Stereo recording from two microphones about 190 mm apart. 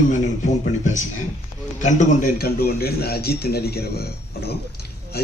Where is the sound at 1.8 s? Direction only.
40° left (ahead or behind).